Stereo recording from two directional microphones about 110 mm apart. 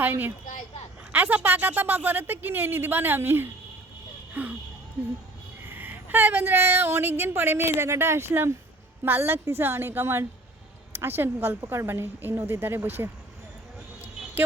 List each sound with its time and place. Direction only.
0.0 s a woman's voice: 20° right (ahead or behind)
5.6 s a woman's voice: 15° right (ahead or behind)